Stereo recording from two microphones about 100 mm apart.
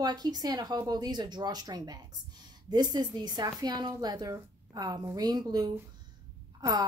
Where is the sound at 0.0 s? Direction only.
45° right (ahead or behind).